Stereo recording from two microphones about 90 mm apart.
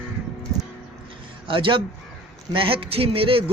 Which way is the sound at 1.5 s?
70° right (ahead or behind).